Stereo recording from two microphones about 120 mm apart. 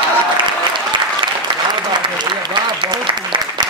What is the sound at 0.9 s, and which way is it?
Applause, 40° right (ahead or behind).